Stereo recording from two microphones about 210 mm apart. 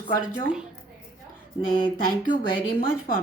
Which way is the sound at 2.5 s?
40° left (ahead or behind).